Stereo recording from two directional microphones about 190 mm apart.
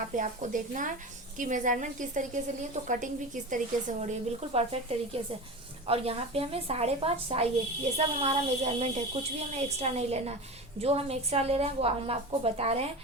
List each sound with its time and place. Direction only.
0.2 s a woman's voice: 45° right (ahead or behind)